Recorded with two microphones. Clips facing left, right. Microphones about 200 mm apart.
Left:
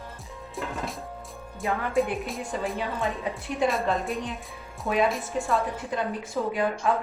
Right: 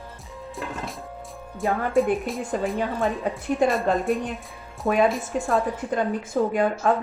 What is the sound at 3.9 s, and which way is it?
Speech, centre (ahead or behind).